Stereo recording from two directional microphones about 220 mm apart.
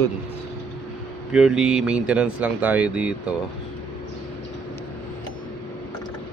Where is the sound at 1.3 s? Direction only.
5° right (ahead or behind).